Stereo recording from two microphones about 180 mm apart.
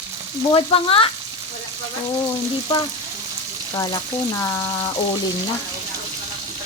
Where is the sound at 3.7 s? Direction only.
20° left (ahead or behind).